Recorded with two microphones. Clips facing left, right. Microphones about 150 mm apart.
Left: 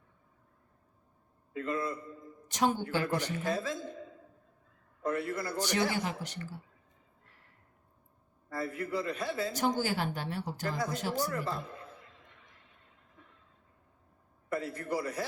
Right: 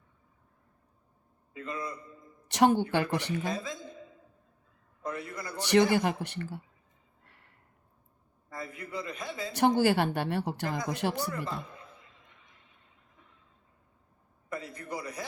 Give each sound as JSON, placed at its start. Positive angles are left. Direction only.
{"t": 1.5, "sound": "a man's voice", "side_deg": -15}
{"t": 2.5, "sound": "speech", "side_deg": -70}
{"t": 3.5, "sound": "a man's voice", "side_deg": -15}
{"t": 5.0, "sound": "a man's voice", "side_deg": -15}
{"t": 5.6, "sound": "speech", "side_deg": -65}
{"t": 8.4, "sound": "a man's voice", "side_deg": -15}
{"t": 9.5, "sound": "speech", "side_deg": -65}
{"t": 11.3, "sound": "a man's voice", "side_deg": -15}
{"t": 14.5, "sound": "a man's voice", "side_deg": -15}